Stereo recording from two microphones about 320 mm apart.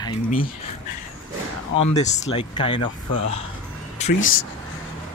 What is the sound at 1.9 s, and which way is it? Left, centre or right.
Speech, left.